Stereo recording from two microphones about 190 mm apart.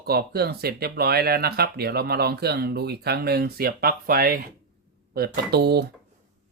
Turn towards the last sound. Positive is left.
turn(degrees=-60)  # may be behind; listen again after turning